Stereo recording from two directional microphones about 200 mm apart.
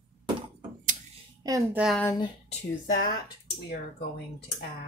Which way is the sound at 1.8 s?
Centre (ahead or behind).